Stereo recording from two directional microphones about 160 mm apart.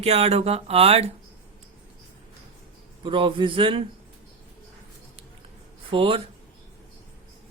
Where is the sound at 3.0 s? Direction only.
30° right (ahead or behind).